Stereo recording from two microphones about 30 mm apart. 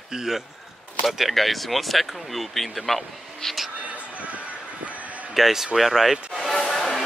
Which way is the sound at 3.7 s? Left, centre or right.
Right.